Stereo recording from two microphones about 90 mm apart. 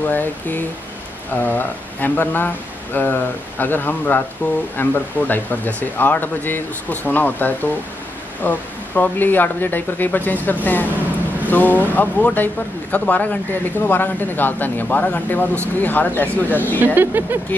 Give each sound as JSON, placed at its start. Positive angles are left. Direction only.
{"t": 0.0, "sound": "speech", "side_deg": 20}
{"t": 16.8, "sound": "speech", "side_deg": -20}